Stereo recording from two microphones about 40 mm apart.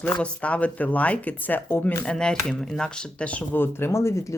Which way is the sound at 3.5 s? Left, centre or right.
Left.